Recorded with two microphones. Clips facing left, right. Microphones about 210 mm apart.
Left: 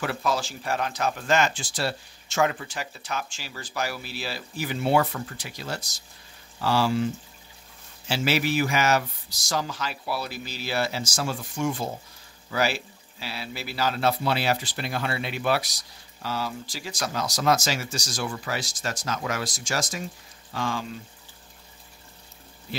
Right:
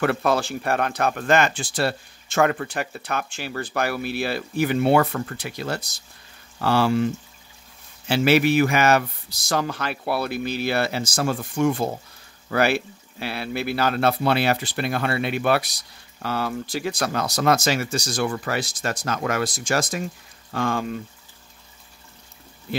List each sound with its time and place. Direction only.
0.0 s speech: 60° right (ahead or behind)
8.1 s speech: 60° right (ahead or behind)